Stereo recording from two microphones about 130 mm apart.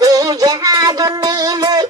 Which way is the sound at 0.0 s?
25° right (ahead or behind).